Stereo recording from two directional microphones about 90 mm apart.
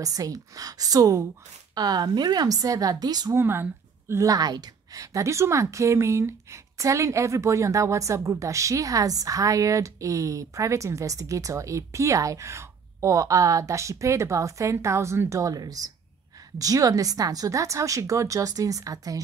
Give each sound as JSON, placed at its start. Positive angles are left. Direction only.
{"t": 0.0, "sound": "a woman's voice", "side_deg": -40}
{"t": 3.3, "sound": "speech", "side_deg": -25}
{"t": 4.1, "sound": "a woman's voice", "side_deg": -40}